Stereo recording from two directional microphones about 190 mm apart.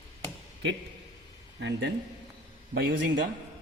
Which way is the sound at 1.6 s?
65° right (ahead or behind).